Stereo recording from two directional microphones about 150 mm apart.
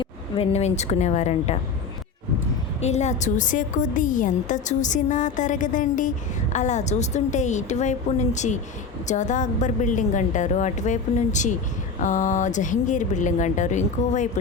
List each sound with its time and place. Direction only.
0.0 s a woman's voice: 40° left (ahead or behind)
2.8 s a woman's voice: 50° left (ahead or behind)